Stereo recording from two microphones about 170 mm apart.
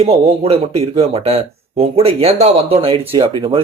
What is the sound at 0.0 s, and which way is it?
Speech, 35° right (ahead or behind).